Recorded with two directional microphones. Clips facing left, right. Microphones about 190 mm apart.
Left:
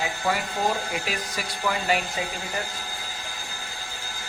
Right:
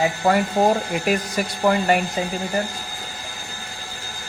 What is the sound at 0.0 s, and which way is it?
Speech, 50° right (ahead or behind).